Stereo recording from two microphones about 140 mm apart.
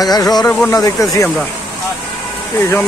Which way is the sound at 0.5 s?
5° left (ahead or behind).